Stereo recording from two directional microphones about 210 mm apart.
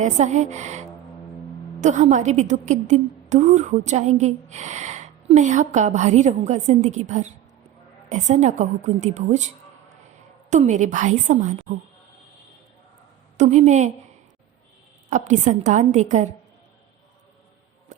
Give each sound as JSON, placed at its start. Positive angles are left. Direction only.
{"t": 0.0, "sound": "a woman's voice", "side_deg": -35}
{"t": 10.5, "sound": "a woman's voice", "side_deg": -35}
{"t": 13.3, "sound": "a woman's voice", "side_deg": -35}
{"t": 15.1, "sound": "a woman's voice", "side_deg": -35}